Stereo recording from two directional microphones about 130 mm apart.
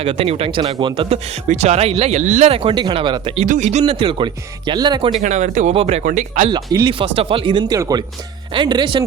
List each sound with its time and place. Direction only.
0.0 s speech: 50° right (ahead or behind)
1.5 s speech: 60° right (ahead or behind)
2.5 s speech: 45° right (ahead or behind)
3.4 s speech: 70° right (ahead or behind); by 5.1 s 35° right (ahead or behind)
5.2 s speech: 70° right (ahead or behind)
5.7 s speech: 50° right (ahead or behind)
6.0 s speech: 80° right
6.5 s speech: 30° right (ahead or behind)
7.0 s speech: 45° right (ahead or behind)